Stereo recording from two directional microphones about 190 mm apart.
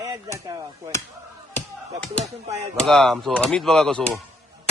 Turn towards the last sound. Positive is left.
turn(degrees=5)  # may be behind; listen again after turning